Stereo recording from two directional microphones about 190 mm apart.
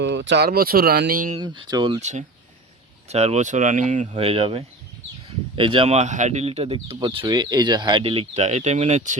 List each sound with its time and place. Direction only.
0.0 s speech: 70° right (ahead or behind); by 1.4 s 45° right (ahead or behind)
1.4 s speech: 25° right (ahead or behind)
2.0 s speech: 35° right (ahead or behind)